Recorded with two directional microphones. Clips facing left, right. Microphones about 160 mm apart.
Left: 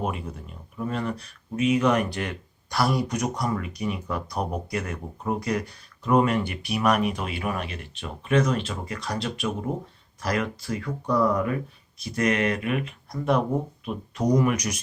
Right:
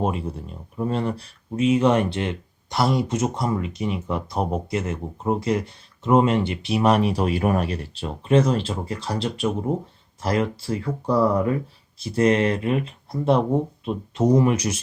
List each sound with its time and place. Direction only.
0.0 s speech: 30° right (ahead or behind)